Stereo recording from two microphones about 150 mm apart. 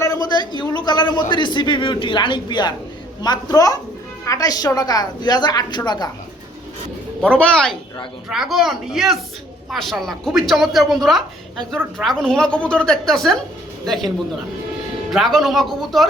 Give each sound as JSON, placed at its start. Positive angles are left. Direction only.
{"t": 0.0, "sound": "a sound", "side_deg": 25}
{"t": 1.3, "sound": "a woman's voice", "side_deg": 30}
{"t": 7.2, "sound": "a woman's voice", "side_deg": 5}
{"t": 15.1, "sound": "a woman's voice", "side_deg": 0}